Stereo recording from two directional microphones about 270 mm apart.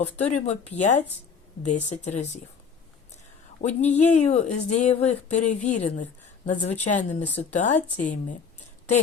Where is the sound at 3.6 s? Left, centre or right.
Left.